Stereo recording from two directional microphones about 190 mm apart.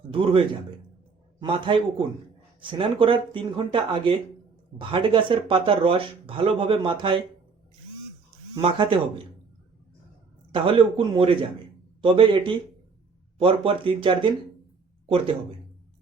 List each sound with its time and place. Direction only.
0.1 s a man's voice: 30° right (ahead or behind)
8.6 s speech: 25° right (ahead or behind)
10.5 s speech: 30° right (ahead or behind)